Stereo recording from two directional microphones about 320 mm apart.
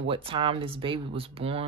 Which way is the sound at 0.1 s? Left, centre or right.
Centre.